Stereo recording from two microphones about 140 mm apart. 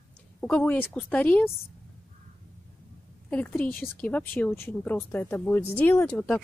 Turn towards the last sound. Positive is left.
turn(degrees=15)  # may be behind; listen again after turning